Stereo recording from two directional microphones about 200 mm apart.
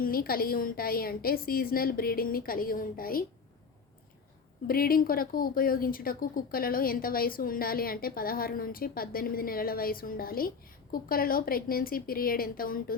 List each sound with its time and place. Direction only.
0.0 s speech: 45° left (ahead or behind)
4.6 s speech: 45° left (ahead or behind)